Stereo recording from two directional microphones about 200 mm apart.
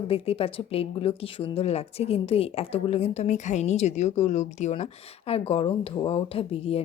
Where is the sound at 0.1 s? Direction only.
30° left (ahead or behind).